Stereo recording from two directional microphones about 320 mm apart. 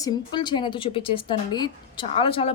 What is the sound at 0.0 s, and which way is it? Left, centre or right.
A woman's voice, centre.